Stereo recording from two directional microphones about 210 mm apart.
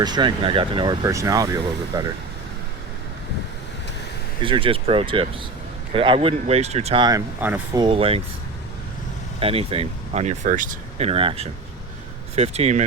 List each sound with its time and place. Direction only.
0.0 s speech: 20° right (ahead or behind)
4.4 s speech: 25° right (ahead or behind)
7.4 s speech: 10° right (ahead or behind)
7.8 s speech: 25° right (ahead or behind)
9.4 s speech: 25° right (ahead or behind)